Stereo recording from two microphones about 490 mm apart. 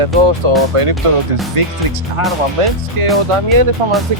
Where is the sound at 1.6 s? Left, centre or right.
Right.